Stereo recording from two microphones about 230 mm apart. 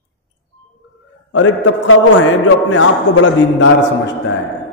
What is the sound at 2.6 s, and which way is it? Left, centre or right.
A man's voice, left.